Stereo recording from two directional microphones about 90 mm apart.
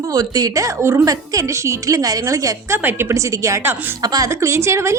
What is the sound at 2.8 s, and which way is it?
A woman's voice, 25° right (ahead or behind).